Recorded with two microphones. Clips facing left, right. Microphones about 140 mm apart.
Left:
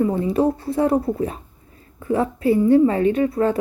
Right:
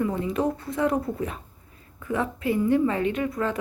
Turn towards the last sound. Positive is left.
turn(degrees=30)  # may be behind; listen again after turning